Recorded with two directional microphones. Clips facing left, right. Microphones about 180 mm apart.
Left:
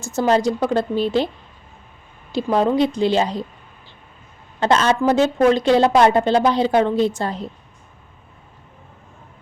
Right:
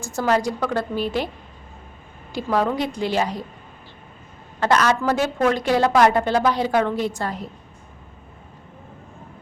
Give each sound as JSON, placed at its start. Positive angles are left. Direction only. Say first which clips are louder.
{"t": 0.0, "sound": "a woman's voice", "louder": "left 4 dB", "side_deg": 25}
{"t": 2.3, "sound": "a woman's voice", "louder": "left 4 dB", "side_deg": 25}
{"t": 4.6, "sound": "a woman's voice", "louder": "left 2 dB", "side_deg": 25}